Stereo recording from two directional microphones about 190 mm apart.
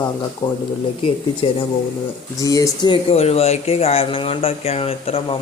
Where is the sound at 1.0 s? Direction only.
30° left (ahead or behind).